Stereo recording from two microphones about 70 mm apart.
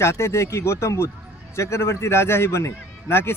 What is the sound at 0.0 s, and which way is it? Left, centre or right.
A man's voice, left.